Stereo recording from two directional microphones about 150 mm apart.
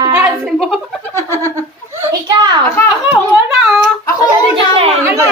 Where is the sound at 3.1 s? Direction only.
Centre (ahead or behind).